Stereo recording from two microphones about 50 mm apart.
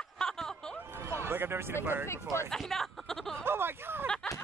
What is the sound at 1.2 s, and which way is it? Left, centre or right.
Speech, right.